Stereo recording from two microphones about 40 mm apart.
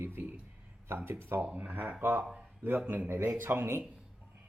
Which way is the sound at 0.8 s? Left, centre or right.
Right.